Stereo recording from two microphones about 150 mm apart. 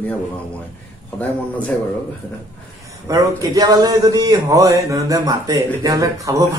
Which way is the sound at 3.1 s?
25° right (ahead or behind).